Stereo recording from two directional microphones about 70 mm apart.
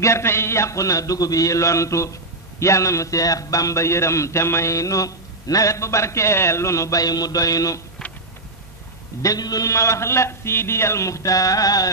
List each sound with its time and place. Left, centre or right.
0.0 s a man's voice: left
9.2 s a man's voice: left